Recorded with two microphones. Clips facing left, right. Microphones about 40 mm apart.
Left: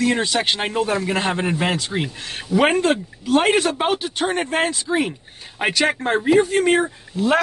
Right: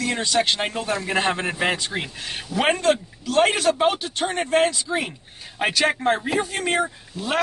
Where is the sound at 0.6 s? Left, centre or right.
Centre.